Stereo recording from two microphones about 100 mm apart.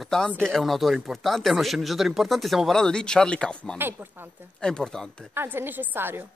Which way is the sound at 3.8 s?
20° right (ahead or behind).